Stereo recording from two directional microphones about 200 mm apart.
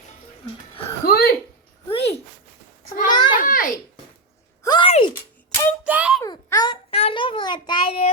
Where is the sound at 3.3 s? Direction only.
45° left (ahead or behind).